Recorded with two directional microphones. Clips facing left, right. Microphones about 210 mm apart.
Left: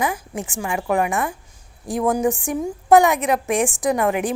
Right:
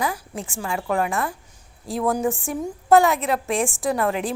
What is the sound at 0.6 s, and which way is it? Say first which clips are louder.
A woman's voice: left 3 dB; 15° left (ahead or behind).